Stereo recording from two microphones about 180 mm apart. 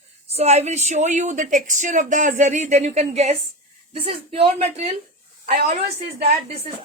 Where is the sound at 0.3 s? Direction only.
35° right (ahead or behind).